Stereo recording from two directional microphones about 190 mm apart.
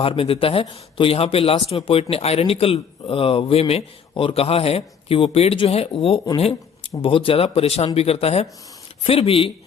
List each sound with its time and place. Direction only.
0.0 s a man's voice: 30° left (ahead or behind)